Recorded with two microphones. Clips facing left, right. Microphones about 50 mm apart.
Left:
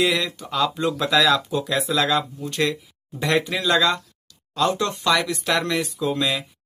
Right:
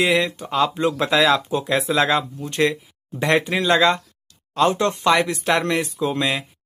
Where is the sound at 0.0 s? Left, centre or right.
Right.